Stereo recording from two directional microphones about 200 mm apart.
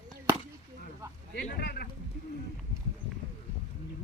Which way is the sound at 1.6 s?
50° left (ahead or behind).